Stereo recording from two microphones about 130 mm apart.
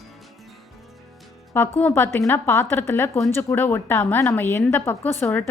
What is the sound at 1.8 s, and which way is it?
A woman's voice, 20° left (ahead or behind).